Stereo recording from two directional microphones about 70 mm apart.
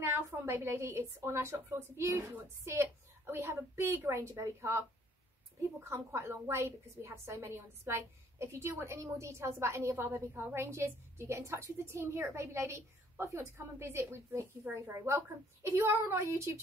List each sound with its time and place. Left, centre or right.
0.0 s a woman's voice: right